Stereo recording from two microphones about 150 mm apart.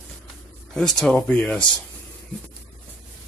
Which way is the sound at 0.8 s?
5° left (ahead or behind).